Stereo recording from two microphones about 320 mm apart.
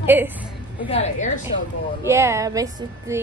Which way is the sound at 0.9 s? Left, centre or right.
Centre.